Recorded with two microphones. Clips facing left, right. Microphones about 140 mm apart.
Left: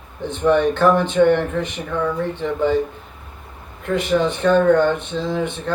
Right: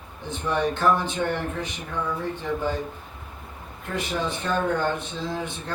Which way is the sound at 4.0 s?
70° left (ahead or behind).